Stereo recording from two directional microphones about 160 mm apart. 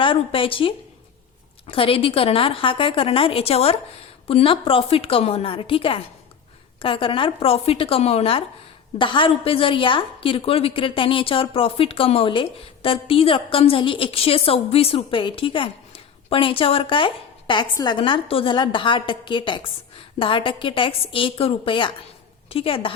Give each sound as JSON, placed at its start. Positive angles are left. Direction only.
{"t": 0.0, "sound": "a woman's voice", "side_deg": 35}